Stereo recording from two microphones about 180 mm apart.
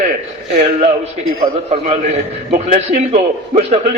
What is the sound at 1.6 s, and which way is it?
A man's voice, 35° right (ahead or behind).